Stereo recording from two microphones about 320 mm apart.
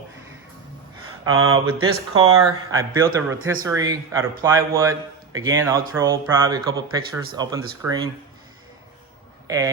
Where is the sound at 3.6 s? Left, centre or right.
Centre.